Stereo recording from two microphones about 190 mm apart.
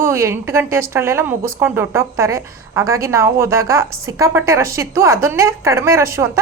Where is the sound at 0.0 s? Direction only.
15° right (ahead or behind).